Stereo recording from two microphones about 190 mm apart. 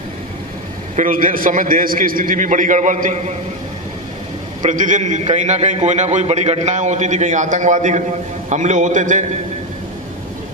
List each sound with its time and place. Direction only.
0.9 s a man's voice: 45° right (ahead or behind)
4.6 s a man's voice: 40° right (ahead or behind)